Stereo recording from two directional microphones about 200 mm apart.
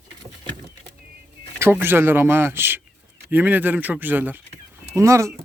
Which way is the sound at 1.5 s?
10° right (ahead or behind).